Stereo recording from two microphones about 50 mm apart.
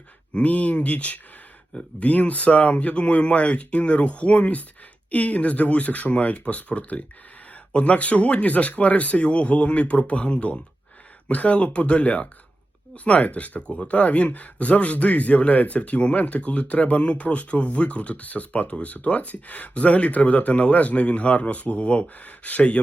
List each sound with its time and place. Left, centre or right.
0.3 s a man's voice: left